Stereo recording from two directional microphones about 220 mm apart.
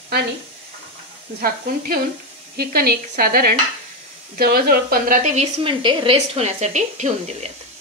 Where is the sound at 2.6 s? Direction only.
45° right (ahead or behind).